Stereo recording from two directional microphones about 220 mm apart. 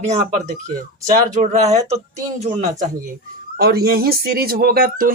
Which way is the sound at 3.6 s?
45° right (ahead or behind).